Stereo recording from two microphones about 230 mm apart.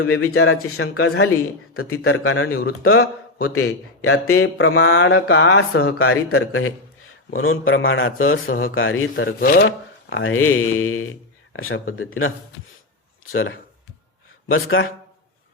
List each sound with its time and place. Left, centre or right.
0.0 s a man's voice: left
6.0 s a man's voice: left
9.4 s a man's voice: left
14.4 s a man's voice: left